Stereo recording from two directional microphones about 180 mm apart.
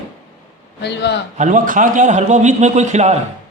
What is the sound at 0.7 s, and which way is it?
Speech, 70° left (ahead or behind).